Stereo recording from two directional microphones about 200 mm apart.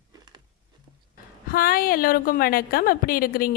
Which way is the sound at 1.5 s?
45° left (ahead or behind).